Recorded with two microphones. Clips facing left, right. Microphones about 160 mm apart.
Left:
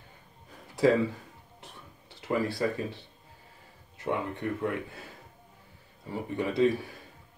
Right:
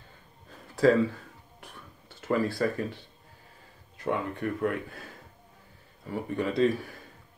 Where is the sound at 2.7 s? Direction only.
20° left (ahead or behind).